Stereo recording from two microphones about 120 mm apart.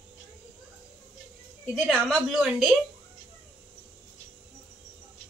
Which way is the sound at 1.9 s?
Centre (ahead or behind).